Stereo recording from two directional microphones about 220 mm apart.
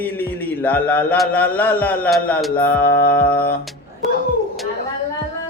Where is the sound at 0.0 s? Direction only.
10° left (ahead or behind).